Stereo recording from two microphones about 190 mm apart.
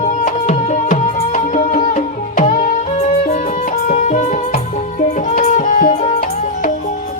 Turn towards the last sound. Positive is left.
turn(degrees=45)  # may be behind; listen again after turning